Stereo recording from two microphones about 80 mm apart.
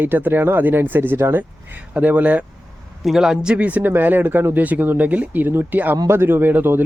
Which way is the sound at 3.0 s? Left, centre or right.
Centre.